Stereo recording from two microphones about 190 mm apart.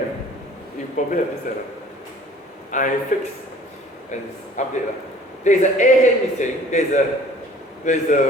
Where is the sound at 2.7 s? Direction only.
40° left (ahead or behind).